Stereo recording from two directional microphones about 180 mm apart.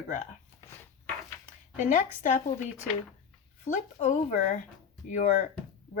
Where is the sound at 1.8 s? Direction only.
45° left (ahead or behind).